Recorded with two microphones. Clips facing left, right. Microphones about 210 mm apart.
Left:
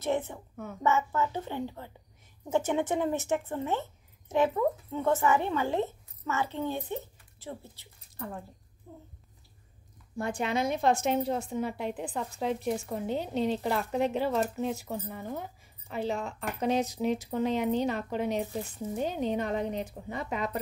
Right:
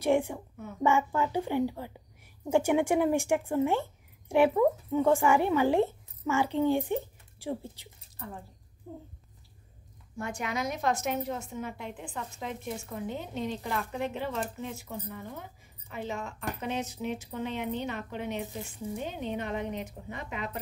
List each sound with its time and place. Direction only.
0.0 s speech: 10° right (ahead or behind)
10.1 s a woman's voice: 30° left (ahead or behind)